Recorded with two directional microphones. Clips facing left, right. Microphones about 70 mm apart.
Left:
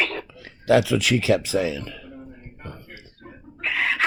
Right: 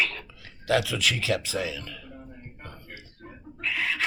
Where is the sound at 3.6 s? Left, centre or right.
Left.